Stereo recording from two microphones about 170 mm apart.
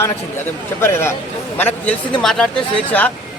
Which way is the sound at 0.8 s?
15° left (ahead or behind).